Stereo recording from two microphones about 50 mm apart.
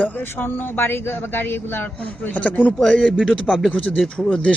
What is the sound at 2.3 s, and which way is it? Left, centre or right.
Speech, left.